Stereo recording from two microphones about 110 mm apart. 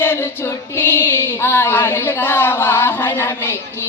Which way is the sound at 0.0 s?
20° left (ahead or behind).